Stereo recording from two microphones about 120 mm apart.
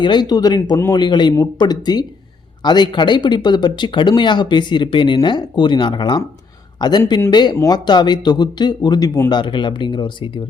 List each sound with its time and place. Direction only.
0.0 s speech: 40° left (ahead or behind)
9.3 s speech: 40° left (ahead or behind)